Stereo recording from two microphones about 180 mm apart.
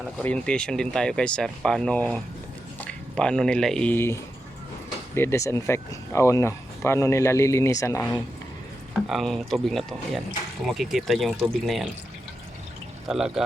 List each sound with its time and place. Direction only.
0.2 s speech: 5° left (ahead or behind)
8.9 s speech: centre (ahead or behind)
13.1 s speech: 5° right (ahead or behind)